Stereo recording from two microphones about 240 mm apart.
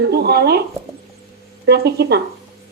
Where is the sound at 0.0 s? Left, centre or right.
Right.